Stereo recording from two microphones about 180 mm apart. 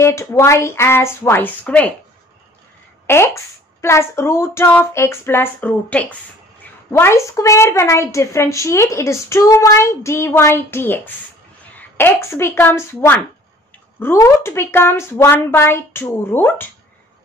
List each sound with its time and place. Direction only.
0.0 s a woman's voice: 15° left (ahead or behind)
3.1 s a woman's voice: 15° left (ahead or behind)